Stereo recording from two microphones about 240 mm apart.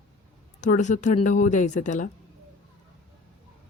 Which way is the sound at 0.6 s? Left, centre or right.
Left.